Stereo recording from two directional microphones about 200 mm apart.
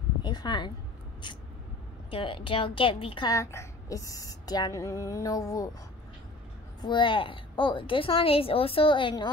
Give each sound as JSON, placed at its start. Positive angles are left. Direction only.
{"t": 0.2, "sound": "speech", "side_deg": 20}
{"t": 2.0, "sound": "a woman's voice", "side_deg": 25}
{"t": 6.8, "sound": "a woman's voice", "side_deg": 25}